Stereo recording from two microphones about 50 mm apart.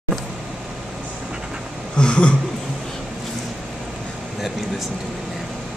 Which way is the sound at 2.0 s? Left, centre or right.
Centre.